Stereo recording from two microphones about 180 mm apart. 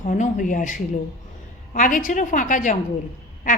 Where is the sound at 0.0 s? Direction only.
45° left (ahead or behind).